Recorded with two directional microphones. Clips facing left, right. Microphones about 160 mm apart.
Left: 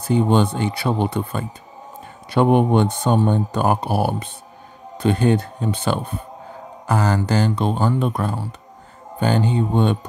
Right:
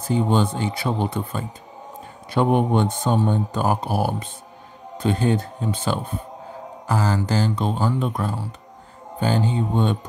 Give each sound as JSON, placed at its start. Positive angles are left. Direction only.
{"t": 0.1, "sound": "speech", "side_deg": 65}